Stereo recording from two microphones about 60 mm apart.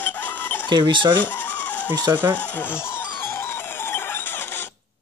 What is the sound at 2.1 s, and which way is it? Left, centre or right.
Speech, right.